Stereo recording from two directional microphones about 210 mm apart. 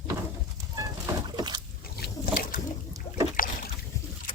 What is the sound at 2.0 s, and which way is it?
Boat, 45° left (ahead or behind).